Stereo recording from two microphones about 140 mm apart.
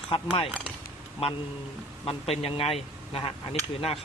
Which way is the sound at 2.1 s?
45° left (ahead or behind).